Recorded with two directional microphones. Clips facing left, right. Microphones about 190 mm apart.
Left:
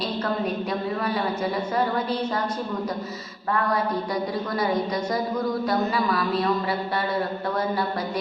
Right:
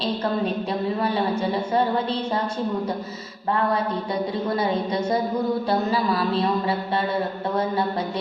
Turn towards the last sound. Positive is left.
turn(degrees=-25)  # may be behind; listen again after turning